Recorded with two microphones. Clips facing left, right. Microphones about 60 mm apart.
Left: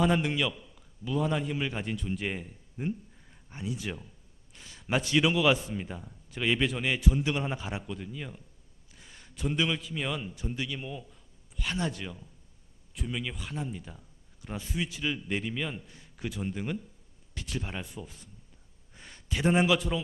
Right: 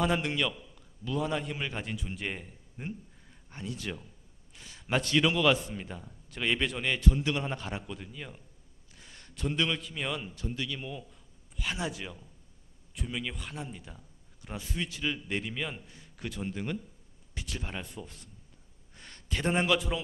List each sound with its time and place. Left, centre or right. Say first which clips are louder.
0.0 s a man's voice: left 2 dB; centre
10.3 s a man's voice: left 1 dB; centre
10.8 s a man's voice: left 1 dB; centre